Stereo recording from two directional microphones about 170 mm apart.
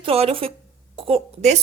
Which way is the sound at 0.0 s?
35° right (ahead or behind).